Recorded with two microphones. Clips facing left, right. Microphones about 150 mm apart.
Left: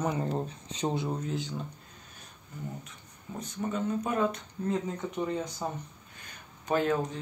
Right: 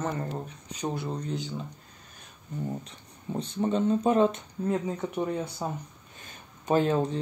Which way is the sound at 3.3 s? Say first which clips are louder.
Right 6 dB; 30° right (ahead or behind).